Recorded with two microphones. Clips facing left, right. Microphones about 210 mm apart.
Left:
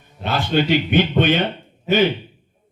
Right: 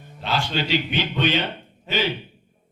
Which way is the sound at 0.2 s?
55° left (ahead or behind).